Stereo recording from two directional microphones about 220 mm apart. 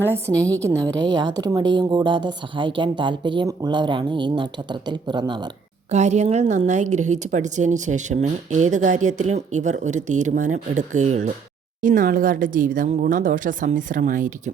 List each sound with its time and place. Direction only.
0.1 s a woman's voice: 15° right (ahead or behind)
5.9 s speech: 30° right (ahead or behind)